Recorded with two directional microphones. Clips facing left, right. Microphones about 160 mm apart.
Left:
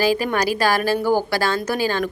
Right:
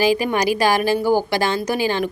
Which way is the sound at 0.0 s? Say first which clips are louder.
Right 2 dB; 15° right (ahead or behind).